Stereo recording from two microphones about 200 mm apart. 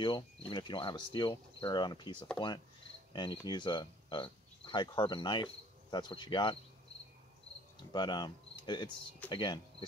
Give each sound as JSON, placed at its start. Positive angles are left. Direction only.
{"t": 0.0, "sound": "speech", "side_deg": 25}
{"t": 3.1, "sound": "cricket", "side_deg": 20}
{"t": 3.4, "sound": "speech", "side_deg": 20}
{"t": 7.9, "sound": "speech", "side_deg": 20}